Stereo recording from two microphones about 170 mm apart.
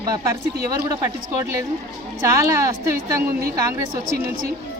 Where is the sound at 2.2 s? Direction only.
15° right (ahead or behind).